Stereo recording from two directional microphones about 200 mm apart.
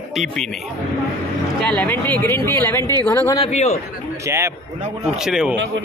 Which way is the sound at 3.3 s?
30° left (ahead or behind).